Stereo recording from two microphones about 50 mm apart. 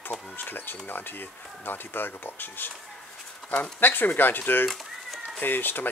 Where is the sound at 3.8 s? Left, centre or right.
Left.